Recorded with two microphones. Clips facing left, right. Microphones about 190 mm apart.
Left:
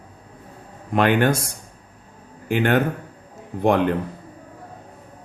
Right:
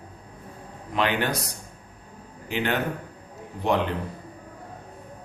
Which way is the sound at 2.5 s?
50° left (ahead or behind).